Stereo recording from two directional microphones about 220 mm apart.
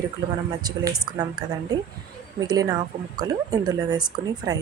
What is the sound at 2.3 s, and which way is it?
A woman's voice, 15° right (ahead or behind).